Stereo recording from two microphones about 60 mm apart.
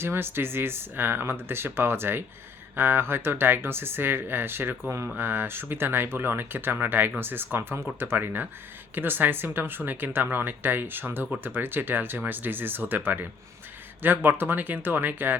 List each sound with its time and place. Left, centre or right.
0.0 s speech: right